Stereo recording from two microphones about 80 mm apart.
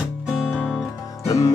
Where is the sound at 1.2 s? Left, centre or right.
Left.